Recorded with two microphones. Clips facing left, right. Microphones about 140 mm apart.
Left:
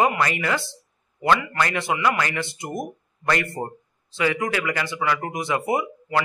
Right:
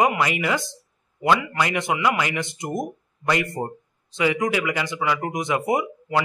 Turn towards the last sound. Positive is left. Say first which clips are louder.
# right 1 dB
turn(degrees=-20)  # may be behind; listen again after turning